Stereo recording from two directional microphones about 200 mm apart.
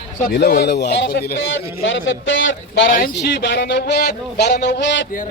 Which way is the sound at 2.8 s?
45° left (ahead or behind).